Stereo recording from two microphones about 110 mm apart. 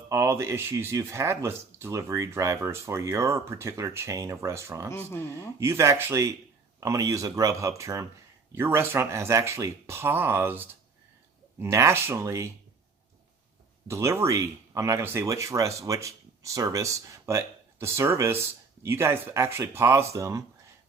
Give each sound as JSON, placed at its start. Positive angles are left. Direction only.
{"t": 0.1, "sound": "speech", "side_deg": -25}
{"t": 4.9, "sound": "speech", "side_deg": 25}
{"t": 5.5, "sound": "speech", "side_deg": -25}
{"t": 13.8, "sound": "speech", "side_deg": -25}